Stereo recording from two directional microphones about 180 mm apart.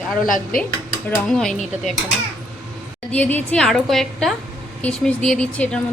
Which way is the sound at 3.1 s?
5° left (ahead or behind).